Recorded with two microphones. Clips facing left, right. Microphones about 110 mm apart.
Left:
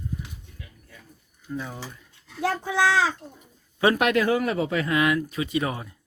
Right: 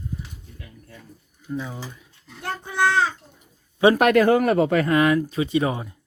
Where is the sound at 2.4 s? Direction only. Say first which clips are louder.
Even; 90° left.